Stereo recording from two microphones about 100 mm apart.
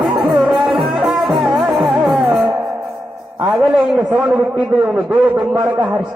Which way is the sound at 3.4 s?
Centre (ahead or behind).